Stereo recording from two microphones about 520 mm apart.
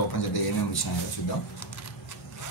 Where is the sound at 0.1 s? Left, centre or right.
Left.